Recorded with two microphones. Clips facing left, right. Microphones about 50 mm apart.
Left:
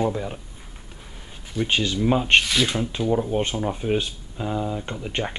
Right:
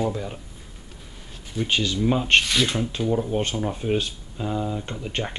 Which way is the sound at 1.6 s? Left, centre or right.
Left.